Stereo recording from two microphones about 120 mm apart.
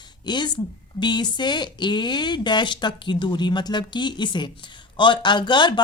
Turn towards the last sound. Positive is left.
turn(degrees=40)  # may be behind; listen again after turning